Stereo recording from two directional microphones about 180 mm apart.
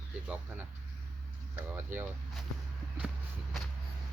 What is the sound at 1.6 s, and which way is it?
Speech, 10° right (ahead or behind).